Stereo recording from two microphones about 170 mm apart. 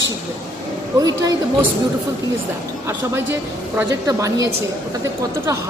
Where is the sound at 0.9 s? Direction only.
20° right (ahead or behind).